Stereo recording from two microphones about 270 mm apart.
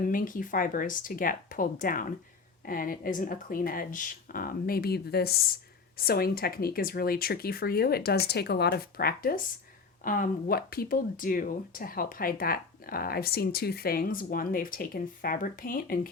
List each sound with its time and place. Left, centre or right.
0.0 s speech: left